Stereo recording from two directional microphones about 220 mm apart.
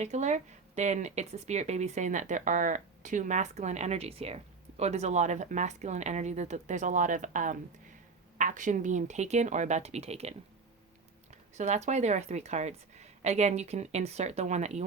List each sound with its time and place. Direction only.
0.0 s speech: 30° right (ahead or behind)
11.5 s speech: 30° right (ahead or behind)